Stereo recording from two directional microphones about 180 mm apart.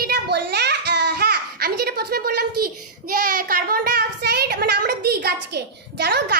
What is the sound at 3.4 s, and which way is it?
A child's voice, 50° right (ahead or behind).